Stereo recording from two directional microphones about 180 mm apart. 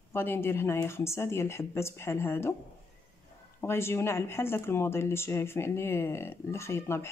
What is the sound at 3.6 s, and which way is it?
Speech, 15° left (ahead or behind).